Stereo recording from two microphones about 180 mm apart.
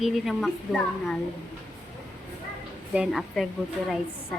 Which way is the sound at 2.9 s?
Centre (ahead or behind).